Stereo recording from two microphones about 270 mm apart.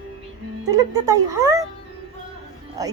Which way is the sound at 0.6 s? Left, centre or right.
Centre.